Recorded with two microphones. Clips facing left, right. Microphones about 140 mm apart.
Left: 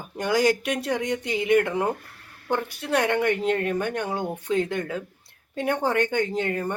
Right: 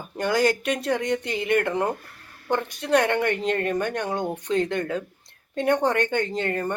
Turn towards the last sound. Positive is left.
turn(degrees=10)  # may be behind; listen again after turning